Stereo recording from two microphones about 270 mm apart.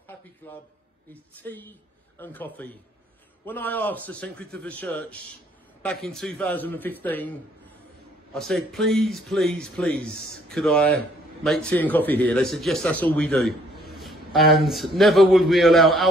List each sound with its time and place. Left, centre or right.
0.4 s a man's voice: centre